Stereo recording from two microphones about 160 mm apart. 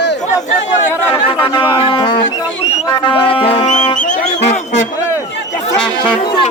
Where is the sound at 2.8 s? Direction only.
30° left (ahead or behind).